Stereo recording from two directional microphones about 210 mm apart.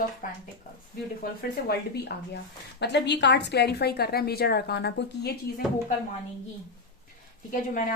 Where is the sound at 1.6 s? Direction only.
50° left (ahead or behind).